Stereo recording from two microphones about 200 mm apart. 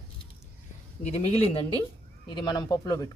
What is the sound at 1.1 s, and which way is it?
Speech, 30° left (ahead or behind).